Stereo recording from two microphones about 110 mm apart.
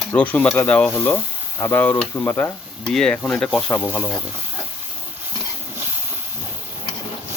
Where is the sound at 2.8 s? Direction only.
5° left (ahead or behind).